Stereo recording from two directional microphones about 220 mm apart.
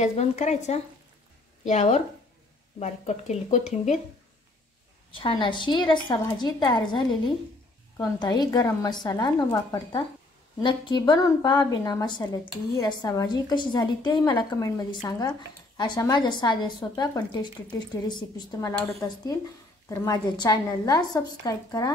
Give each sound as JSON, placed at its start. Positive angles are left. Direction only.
{"t": 0.0, "sound": "speech", "side_deg": 30}
{"t": 5.2, "sound": "a woman's voice", "side_deg": 20}